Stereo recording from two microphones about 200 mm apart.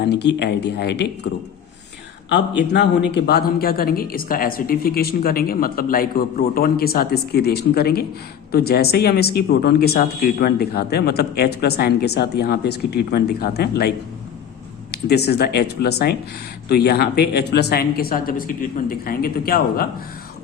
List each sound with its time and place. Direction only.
0.0 s speech: 55° left (ahead or behind)
3.1 s speech: 55° left (ahead or behind)
14.9 s speech: 55° left (ahead or behind)